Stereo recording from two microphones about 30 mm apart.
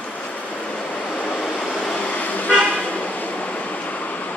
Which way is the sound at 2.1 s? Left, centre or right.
Left.